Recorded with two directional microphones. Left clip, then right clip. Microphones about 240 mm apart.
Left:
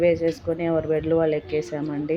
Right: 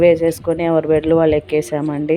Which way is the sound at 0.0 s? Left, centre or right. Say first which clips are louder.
Right 8 dB; right.